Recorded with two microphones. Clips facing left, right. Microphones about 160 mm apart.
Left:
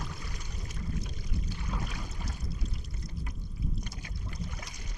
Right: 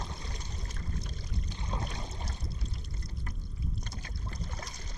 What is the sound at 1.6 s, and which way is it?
Boat, 25° right (ahead or behind).